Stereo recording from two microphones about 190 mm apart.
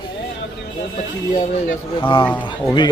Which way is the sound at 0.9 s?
40° left (ahead or behind).